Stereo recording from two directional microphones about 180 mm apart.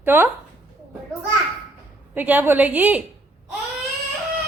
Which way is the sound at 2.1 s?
10° right (ahead or behind).